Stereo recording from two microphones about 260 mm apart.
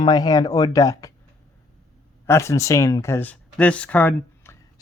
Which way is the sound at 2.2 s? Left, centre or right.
Centre.